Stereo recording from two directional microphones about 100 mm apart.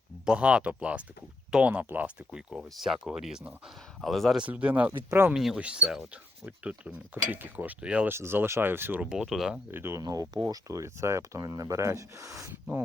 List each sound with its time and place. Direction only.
0.3 s speech: 10° right (ahead or behind)
2.3 s speech: 5° right (ahead or behind)
4.4 s speech: 15° right (ahead or behind)
5.3 s speech: centre (ahead or behind)
8.1 s speech: 25° right (ahead or behind)
9.0 s speech: 5° right (ahead or behind)
9.7 s speech: 25° right (ahead or behind)
10.0 s speech: 40° right (ahead or behind)